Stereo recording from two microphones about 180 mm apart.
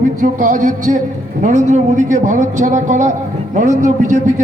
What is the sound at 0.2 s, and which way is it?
A man's voice, 45° right (ahead or behind).